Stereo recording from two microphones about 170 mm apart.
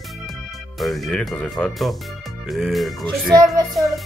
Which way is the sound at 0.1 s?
Centre (ahead or behind).